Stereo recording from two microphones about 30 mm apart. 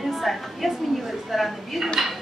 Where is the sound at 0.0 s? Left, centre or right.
Centre.